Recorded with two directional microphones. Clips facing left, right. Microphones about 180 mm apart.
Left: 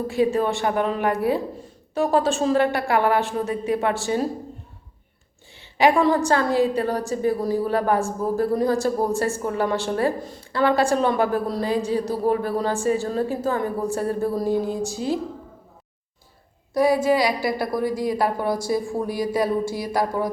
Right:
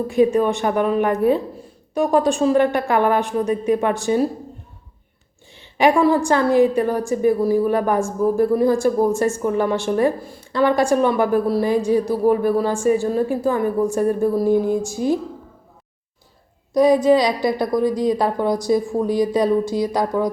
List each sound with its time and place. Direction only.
0.1 s a woman's voice: 20° right (ahead or behind)
5.8 s a woman's voice: 15° right (ahead or behind)
16.7 s a woman's voice: 20° right (ahead or behind)